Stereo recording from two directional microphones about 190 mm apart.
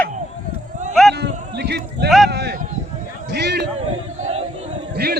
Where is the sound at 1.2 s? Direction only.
60° right (ahead or behind).